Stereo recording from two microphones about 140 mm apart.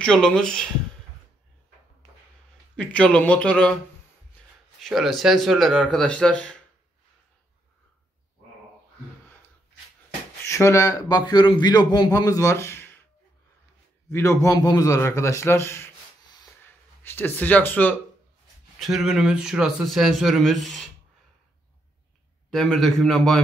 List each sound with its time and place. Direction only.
0.0 s a man's voice: 5° left (ahead or behind)
2.7 s a man's voice: 10° left (ahead or behind)
10.4 s a man's voice: 20° left (ahead or behind)
14.1 s a man's voice: 20° left (ahead or behind)
17.0 s speech: 15° left (ahead or behind)
18.8 s a man's voice: 5° right (ahead or behind)
22.5 s a man's voice: 5° left (ahead or behind)